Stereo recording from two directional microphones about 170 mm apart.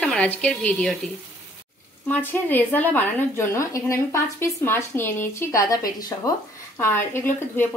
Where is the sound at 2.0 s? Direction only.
10° left (ahead or behind).